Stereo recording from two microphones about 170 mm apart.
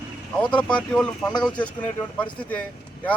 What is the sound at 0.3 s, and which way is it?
Speech, 5° left (ahead or behind).